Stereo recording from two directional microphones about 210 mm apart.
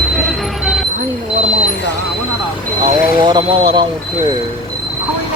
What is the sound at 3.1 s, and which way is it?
Speech, 20° right (ahead or behind).